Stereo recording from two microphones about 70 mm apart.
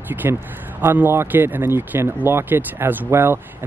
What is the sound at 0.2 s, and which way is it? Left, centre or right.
Speech, right.